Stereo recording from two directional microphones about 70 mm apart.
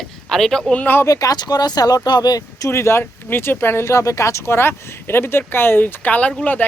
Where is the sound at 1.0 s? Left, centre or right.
Left.